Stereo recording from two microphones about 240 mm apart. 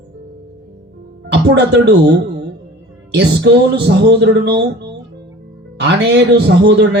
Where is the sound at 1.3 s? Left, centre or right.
Right.